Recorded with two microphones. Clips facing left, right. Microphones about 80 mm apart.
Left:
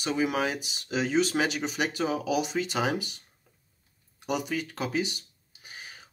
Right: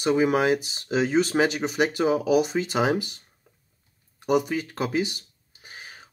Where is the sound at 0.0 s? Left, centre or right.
Right.